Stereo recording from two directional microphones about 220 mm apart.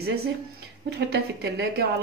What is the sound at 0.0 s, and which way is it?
A woman's voice, 45° right (ahead or behind).